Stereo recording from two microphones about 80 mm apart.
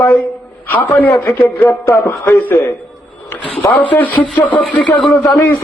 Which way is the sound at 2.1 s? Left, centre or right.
Left.